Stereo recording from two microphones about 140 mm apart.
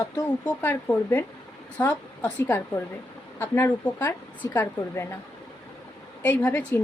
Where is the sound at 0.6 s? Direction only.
15° left (ahead or behind).